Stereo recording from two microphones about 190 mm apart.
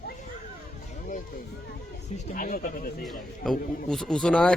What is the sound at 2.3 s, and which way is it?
Speech, 45° left (ahead or behind).